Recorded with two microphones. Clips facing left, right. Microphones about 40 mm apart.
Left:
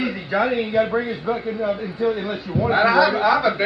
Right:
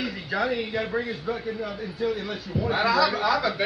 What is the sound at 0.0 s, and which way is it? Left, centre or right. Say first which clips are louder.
A man's voice: left 6 dB; left.